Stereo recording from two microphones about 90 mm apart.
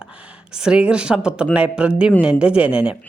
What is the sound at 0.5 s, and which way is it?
Speech, 10° right (ahead or behind).